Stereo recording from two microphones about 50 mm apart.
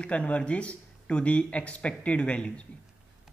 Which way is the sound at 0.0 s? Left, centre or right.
Left.